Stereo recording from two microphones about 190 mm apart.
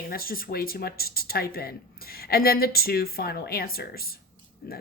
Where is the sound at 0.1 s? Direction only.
50° left (ahead or behind).